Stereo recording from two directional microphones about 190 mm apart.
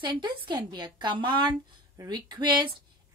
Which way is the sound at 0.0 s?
25° right (ahead or behind).